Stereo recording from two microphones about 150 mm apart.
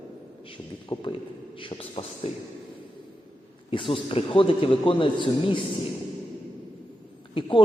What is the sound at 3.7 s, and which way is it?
A man's voice, 35° left (ahead or behind).